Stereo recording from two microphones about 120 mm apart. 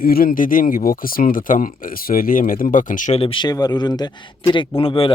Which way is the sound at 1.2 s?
90° left.